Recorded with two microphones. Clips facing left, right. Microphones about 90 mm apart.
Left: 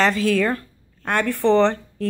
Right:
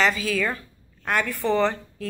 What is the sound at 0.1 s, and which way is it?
Speech, 55° left (ahead or behind).